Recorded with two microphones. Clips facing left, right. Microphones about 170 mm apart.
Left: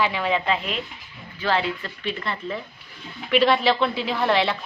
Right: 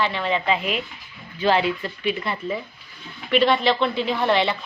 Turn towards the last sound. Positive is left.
turn(degrees=0)  # may be behind; listen again after turning